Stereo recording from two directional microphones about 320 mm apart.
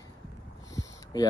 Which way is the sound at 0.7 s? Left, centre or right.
Centre.